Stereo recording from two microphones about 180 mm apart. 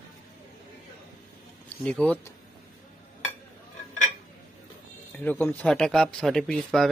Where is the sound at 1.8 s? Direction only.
5° left (ahead or behind).